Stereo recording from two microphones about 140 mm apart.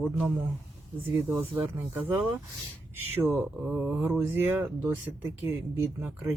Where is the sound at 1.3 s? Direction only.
15° right (ahead or behind).